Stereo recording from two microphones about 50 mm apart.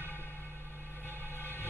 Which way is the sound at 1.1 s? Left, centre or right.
Left.